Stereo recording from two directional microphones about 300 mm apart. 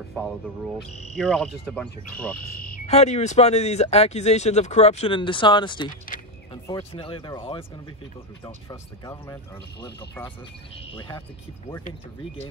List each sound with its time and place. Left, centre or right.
1.1 s speech: centre
2.9 s speech: left
8.6 s speech: centre